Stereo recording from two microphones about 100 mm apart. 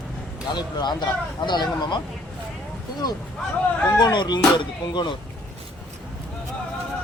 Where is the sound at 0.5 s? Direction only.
45° left (ahead or behind).